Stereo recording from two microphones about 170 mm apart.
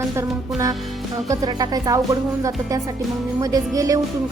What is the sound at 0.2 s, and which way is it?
A woman's voice, 20° right (ahead or behind).